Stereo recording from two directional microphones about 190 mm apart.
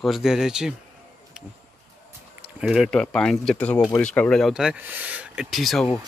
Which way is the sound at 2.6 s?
Centre (ahead or behind).